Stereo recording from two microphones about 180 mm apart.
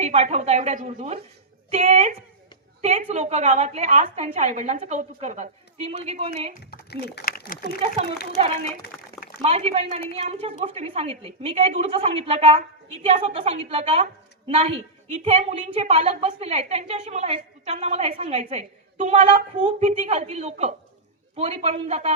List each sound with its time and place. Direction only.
0.0 s a woman's voice: 35° right (ahead or behind)
6.5 s speech: 60° left (ahead or behind)
8.4 s a woman's voice: 30° right (ahead or behind)
8.9 s a sound: 5° left (ahead or behind)
9.4 s a woman's voice: 35° right (ahead or behind)